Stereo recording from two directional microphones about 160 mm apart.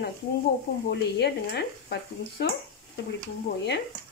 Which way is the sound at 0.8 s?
90° left.